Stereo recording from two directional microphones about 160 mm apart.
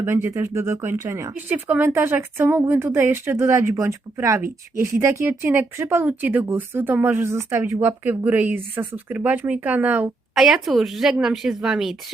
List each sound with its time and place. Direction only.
0.0 s speech: 15° right (ahead or behind); by 11.9 s centre (ahead or behind)